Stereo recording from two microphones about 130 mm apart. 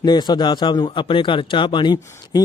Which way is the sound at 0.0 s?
35° left (ahead or behind).